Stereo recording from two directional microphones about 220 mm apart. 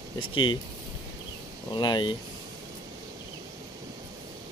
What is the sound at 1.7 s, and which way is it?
Speech, 20° left (ahead or behind).